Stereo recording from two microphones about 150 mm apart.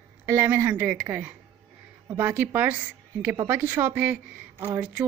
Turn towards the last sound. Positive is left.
turn(degrees=-10)  # may be behind; listen again after turning